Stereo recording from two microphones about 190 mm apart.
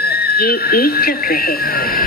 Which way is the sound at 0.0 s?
55° left (ahead or behind).